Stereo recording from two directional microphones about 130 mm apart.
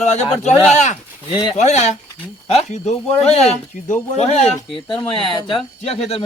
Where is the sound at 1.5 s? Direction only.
60° left (ahead or behind).